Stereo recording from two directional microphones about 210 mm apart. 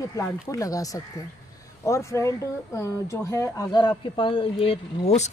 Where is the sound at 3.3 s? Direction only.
20° left (ahead or behind).